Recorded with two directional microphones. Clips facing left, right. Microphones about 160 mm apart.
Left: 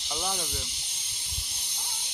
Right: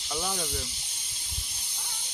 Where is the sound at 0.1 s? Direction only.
10° left (ahead or behind).